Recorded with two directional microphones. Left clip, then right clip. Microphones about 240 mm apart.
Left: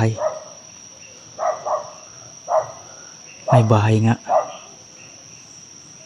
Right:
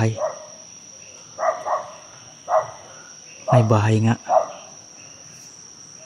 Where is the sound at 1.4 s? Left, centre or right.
Centre.